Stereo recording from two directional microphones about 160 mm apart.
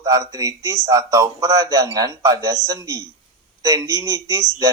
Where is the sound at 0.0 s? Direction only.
20° right (ahead or behind).